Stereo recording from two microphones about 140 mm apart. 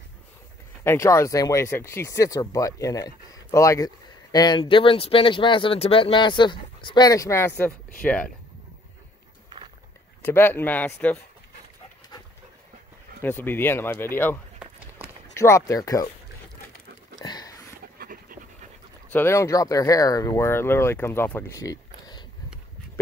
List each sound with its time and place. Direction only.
0.8 s speech: 20° left (ahead or behind)
10.2 s speech: 15° left (ahead or behind)
13.2 s speech: 15° left (ahead or behind)
17.2 s a sound: 30° left (ahead or behind)
17.9 s dog: 90° right
19.1 s speech: 20° left (ahead or behind)